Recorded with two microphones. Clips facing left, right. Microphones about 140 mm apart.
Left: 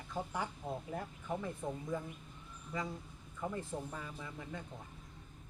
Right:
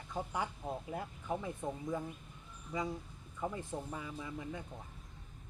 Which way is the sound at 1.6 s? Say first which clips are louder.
Right 1 dB; 15° right (ahead or behind).